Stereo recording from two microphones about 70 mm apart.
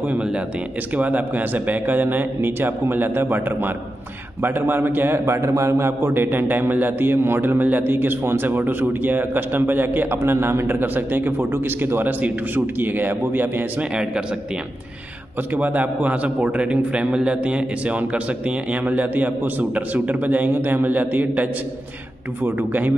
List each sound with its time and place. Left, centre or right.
0.0 s a sound: centre
0.9 s a man's voice: right
15.5 s a man's voice: right